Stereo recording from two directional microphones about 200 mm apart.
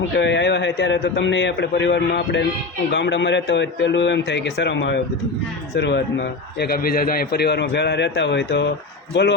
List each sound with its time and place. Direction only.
0.1 s a man's voice: 60° left (ahead or behind)
6.6 s a man's voice: 50° left (ahead or behind)